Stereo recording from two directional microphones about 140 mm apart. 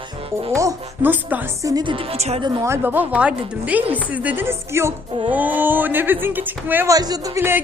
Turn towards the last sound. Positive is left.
turn(degrees=-20)  # may be behind; listen again after turning